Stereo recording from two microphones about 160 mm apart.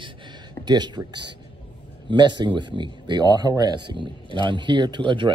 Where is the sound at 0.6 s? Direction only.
25° right (ahead or behind).